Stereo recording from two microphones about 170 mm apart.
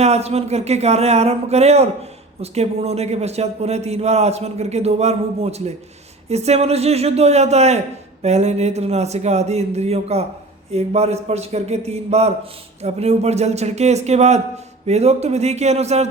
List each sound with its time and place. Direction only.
0.0 s a man's voice: 40° right (ahead or behind)